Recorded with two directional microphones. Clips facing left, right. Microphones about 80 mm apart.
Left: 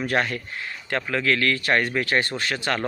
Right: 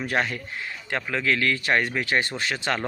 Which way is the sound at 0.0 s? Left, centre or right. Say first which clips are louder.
Left 2 dB; centre.